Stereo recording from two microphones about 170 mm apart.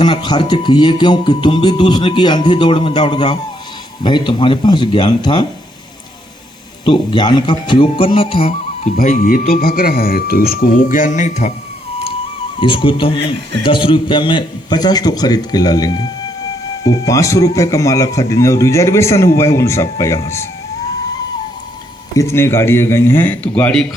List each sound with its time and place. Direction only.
0.0 s music: 25° left (ahead or behind)
6.8 s music: 30° left (ahead or behind)
9.0 s speech: 55° left (ahead or behind)
12.5 s speech: 30° left (ahead or behind)
13.6 s music: 30° left (ahead or behind)
19.5 s speech: 15° left (ahead or behind)
22.1 s speech: 15° left (ahead or behind)